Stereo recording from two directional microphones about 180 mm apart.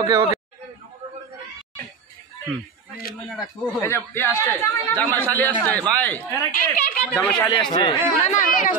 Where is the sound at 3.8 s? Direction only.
15° left (ahead or behind).